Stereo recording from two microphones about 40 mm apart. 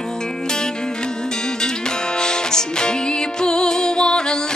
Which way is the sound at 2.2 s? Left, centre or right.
Centre.